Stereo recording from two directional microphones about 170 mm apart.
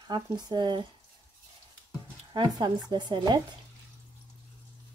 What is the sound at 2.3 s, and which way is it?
Speech, 25° right (ahead or behind).